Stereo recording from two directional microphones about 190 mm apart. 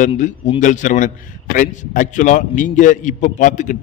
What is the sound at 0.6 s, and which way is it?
A man's voice, 40° left (ahead or behind).